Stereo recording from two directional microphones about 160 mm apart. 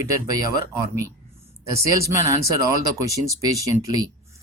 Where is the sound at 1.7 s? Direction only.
20° right (ahead or behind).